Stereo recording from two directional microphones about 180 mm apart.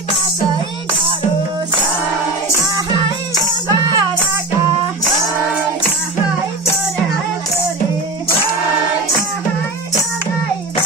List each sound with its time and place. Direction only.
3.7 s music: 20° right (ahead or behind)